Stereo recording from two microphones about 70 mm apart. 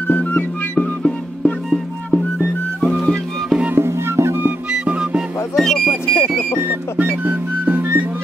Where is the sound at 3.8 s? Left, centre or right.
Right.